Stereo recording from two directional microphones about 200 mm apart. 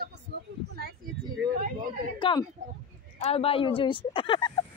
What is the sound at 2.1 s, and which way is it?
Speech, 25° left (ahead or behind).